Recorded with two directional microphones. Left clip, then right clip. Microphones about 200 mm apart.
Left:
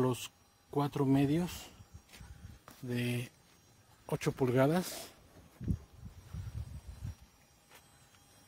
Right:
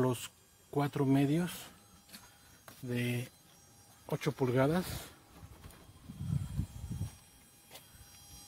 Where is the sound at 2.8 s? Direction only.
10° left (ahead or behind).